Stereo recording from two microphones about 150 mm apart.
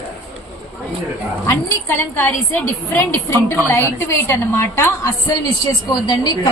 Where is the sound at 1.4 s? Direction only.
15° left (ahead or behind).